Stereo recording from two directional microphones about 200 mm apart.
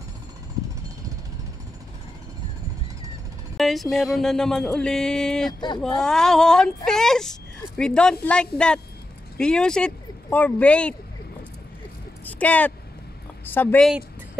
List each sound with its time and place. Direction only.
3.5 s speech: centre (ahead or behind)
5.5 s speech: 20° left (ahead or behind)
5.8 s speech: 5° left (ahead or behind)
12.3 s speech: 10° left (ahead or behind)